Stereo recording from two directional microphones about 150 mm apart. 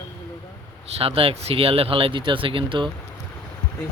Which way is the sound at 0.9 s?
40° right (ahead or behind).